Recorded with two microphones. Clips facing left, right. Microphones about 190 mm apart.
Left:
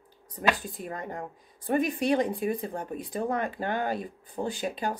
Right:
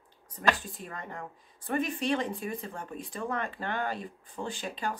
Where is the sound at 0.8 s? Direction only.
40° left (ahead or behind).